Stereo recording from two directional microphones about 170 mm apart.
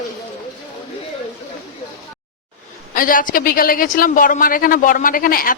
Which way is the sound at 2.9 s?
55° left (ahead or behind).